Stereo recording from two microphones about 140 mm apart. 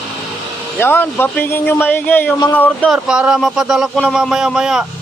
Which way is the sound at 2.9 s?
5° right (ahead or behind).